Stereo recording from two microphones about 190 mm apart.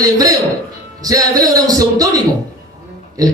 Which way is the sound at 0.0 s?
20° right (ahead or behind).